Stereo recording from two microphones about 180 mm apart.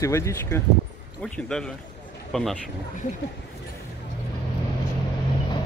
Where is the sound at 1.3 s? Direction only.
5° left (ahead or behind).